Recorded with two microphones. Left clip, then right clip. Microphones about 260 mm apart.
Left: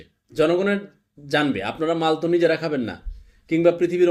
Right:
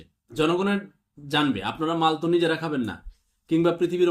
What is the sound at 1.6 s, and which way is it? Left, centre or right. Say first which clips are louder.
Speech: left 1 dB; right.